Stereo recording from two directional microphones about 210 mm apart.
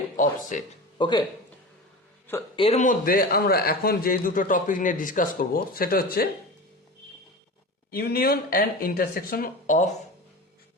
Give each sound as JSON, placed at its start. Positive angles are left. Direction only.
{"t": 0.2, "sound": "a man's voice", "side_deg": 35}
{"t": 0.9, "sound": "speech", "side_deg": 20}
{"t": 2.6, "sound": "a man's voice", "side_deg": 30}
{"t": 7.9, "sound": "speech", "side_deg": 45}